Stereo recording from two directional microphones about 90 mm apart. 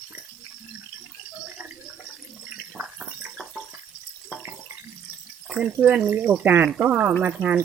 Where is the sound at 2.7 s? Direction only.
10° right (ahead or behind).